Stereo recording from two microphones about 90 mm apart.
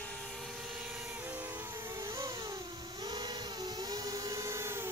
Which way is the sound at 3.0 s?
50° right (ahead or behind).